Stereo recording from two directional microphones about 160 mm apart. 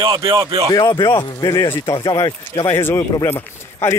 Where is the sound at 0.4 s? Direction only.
20° right (ahead or behind).